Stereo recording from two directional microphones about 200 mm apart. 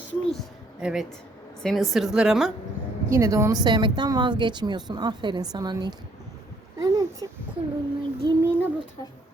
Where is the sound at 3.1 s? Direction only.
15° right (ahead or behind).